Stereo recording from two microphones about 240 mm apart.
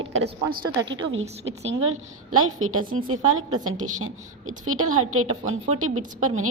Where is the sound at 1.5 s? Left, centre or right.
Right.